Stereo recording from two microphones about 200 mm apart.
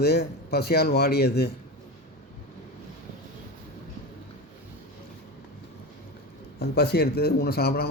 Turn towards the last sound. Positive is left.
turn(degrees=50)  # may be behind; listen again after turning